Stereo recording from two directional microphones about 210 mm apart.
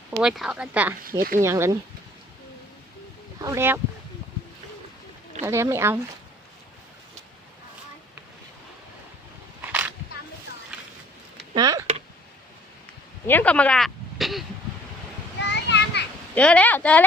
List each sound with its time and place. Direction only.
0.2 s speech: 5° right (ahead or behind)
3.4 s speech: 15° right (ahead or behind)
5.4 s speech: 10° right (ahead or behind)
9.6 s a sound: 10° right (ahead or behind)
11.5 s speech: 20° right (ahead or behind)
13.2 s speech: 10° left (ahead or behind)
15.4 s children playing: 55° left (ahead or behind)
16.3 s speech: 5° left (ahead or behind)